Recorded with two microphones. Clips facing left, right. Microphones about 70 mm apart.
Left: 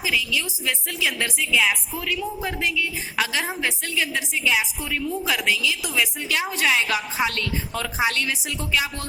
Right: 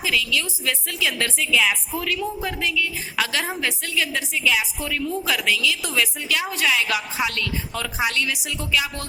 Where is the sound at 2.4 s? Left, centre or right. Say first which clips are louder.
Right 1 dB; left.